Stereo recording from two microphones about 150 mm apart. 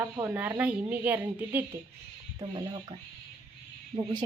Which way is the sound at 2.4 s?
30° right (ahead or behind).